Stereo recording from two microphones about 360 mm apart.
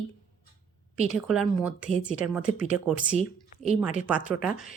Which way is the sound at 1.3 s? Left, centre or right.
Centre.